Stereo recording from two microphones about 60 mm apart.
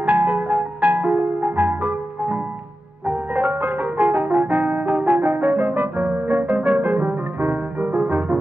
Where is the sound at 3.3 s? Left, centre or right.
Right.